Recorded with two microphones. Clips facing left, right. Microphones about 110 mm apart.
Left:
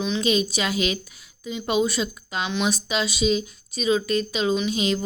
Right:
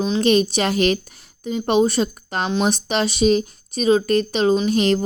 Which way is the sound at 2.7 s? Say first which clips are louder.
Right 5 dB; 55° right (ahead or behind).